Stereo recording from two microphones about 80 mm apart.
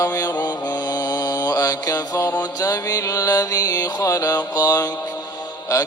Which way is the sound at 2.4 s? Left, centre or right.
Left.